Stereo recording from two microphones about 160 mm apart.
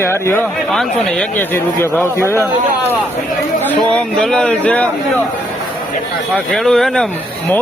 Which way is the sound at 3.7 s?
5° left (ahead or behind).